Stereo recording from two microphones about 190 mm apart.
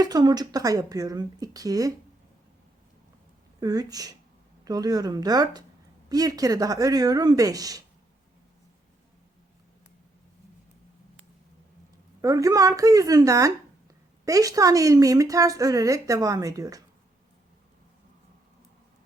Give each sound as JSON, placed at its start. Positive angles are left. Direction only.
{"t": 0.0, "sound": "a woman's voice", "side_deg": -20}
{"t": 3.6, "sound": "a woman's voice", "side_deg": -20}
{"t": 12.2, "sound": "speech", "side_deg": -15}